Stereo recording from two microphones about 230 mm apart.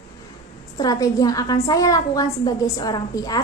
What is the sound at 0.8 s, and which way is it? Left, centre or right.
A woman's voice, centre.